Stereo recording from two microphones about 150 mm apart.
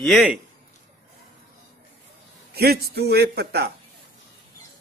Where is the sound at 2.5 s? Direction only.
90° right.